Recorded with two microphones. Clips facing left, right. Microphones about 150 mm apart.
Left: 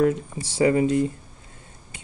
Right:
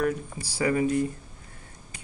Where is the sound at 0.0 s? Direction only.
25° left (ahead or behind).